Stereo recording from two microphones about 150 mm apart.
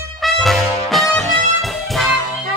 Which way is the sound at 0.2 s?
Centre (ahead or behind).